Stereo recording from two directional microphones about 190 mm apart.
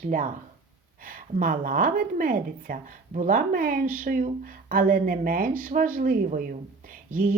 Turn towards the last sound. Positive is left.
turn(degrees=-45)  # may be behind; listen again after turning